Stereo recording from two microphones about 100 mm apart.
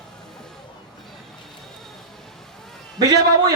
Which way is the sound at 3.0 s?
40° right (ahead or behind).